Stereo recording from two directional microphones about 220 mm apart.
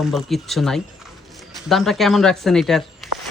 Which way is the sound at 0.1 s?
Centre (ahead or behind).